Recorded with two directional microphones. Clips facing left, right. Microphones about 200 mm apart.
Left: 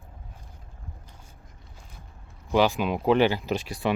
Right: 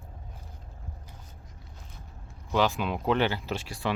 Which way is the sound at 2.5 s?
15° left (ahead or behind).